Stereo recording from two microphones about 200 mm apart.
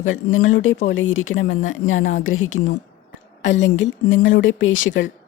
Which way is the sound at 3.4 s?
65° left (ahead or behind).